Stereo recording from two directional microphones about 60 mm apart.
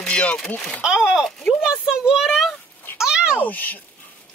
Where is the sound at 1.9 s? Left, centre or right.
Centre.